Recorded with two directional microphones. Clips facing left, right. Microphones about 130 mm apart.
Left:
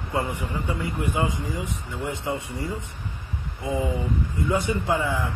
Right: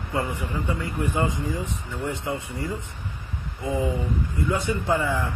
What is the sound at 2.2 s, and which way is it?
Speech, 25° left (ahead or behind).